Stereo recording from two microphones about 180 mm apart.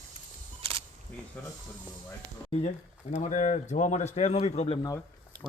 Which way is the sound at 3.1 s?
40° left (ahead or behind).